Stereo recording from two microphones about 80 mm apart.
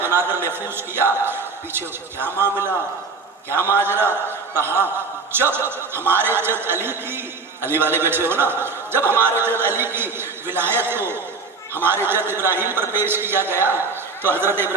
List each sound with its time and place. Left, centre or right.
0.0 s a man's voice: right